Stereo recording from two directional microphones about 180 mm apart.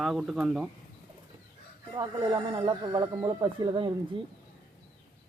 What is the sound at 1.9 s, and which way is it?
Speech, 25° right (ahead or behind).